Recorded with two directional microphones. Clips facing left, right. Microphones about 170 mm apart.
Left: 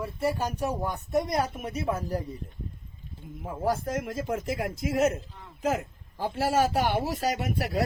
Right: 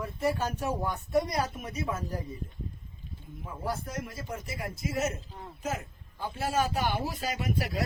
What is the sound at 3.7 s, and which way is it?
Speech, 90° left.